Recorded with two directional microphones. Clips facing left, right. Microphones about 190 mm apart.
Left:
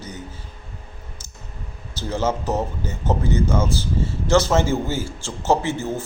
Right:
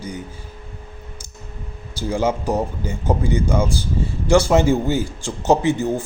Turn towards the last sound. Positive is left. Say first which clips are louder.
# right 5 dB
turn(degrees=-15)  # may be behind; listen again after turning